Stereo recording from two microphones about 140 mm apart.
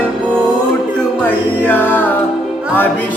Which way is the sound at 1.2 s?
10° left (ahead or behind).